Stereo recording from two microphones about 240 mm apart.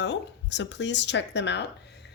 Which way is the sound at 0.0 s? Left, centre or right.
Left.